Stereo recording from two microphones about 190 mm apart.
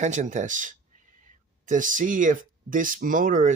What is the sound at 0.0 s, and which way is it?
Speech, 40° right (ahead or behind).